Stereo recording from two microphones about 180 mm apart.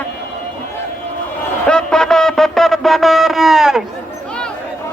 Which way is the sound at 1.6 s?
5° left (ahead or behind).